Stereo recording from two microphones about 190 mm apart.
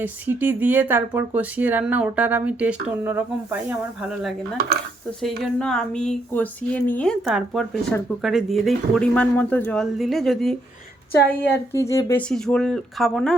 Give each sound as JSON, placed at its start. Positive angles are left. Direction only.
{"t": 0.0, "sound": "a woman's voice", "side_deg": -10}
{"t": 11.9, "sound": "speech", "side_deg": 15}
{"t": 12.3, "sound": "a woman's voice", "side_deg": 5}